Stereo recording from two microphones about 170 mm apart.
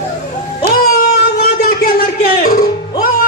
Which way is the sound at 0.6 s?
65° left (ahead or behind).